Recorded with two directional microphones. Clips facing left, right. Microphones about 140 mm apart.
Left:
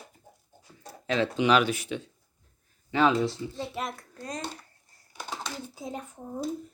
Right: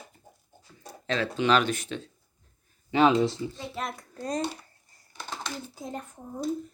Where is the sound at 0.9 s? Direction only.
10° left (ahead or behind).